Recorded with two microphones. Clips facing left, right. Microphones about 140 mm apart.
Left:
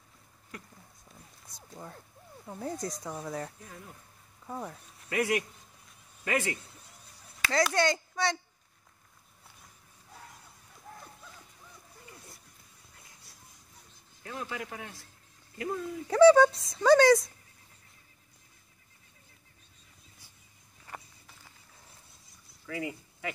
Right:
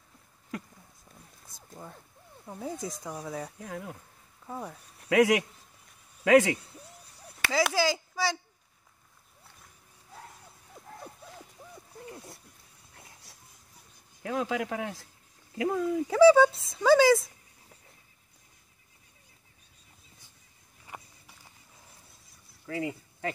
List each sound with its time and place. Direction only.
1.5 s speech: centre (ahead or behind)
3.6 s speech: 75° right (ahead or behind)
4.5 s speech: 5° right (ahead or behind)
5.1 s speech: 90° right
7.7 s speech: 5° right (ahead or behind)
14.2 s speech: 90° right
16.1 s speech: centre (ahead or behind)
22.7 s speech: 30° right (ahead or behind)